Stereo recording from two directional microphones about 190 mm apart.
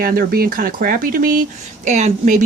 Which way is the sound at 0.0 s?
50° right (ahead or behind).